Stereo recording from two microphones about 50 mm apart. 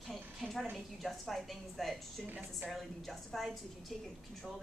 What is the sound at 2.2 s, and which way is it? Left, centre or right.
Speech, right.